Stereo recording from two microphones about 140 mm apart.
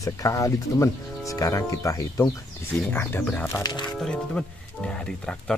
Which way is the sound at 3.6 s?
35° left (ahead or behind).